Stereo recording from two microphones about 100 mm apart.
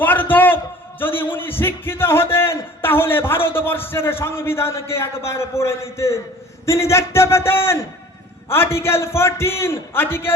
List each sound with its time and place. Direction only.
0.0 s a man's voice: 20° left (ahead or behind)